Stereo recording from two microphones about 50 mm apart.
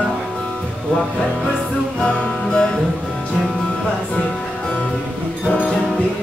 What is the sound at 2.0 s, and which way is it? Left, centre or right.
Music, centre.